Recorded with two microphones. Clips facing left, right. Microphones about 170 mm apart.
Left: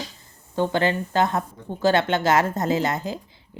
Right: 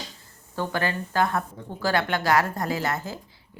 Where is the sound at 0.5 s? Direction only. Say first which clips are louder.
Left 6 dB; 20° left (ahead or behind).